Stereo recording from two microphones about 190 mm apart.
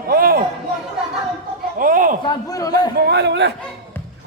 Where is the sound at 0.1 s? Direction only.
50° right (ahead or behind).